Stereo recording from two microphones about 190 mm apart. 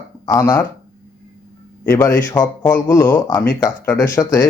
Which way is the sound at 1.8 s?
15° left (ahead or behind).